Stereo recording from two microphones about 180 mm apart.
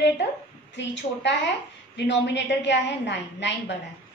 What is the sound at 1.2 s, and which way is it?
A woman's voice, 80° left.